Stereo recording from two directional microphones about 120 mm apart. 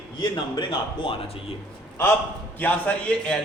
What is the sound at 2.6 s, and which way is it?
Speech, 15° left (ahead or behind).